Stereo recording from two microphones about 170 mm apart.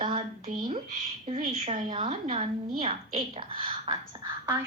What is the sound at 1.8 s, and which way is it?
Speech, 25° right (ahead or behind).